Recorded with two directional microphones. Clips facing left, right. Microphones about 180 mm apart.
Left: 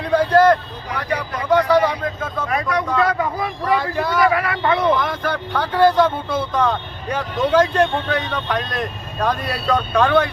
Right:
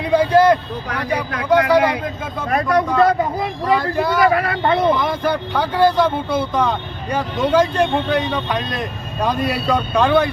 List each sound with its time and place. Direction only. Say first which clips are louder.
0.0 s speech: right 1 dB; 10° right (ahead or behind)
2.5 s speech: right 6 dB; 50° right (ahead or behind)
3.0 s speech: right 4 dB; 25° right (ahead or behind)
3.8 s speech: right 2 dB; 5° right (ahead or behind)
4.3 s speech: right 2 dB; 35° right (ahead or behind)
4.9 s speech: right 3 dB; 10° right (ahead or behind)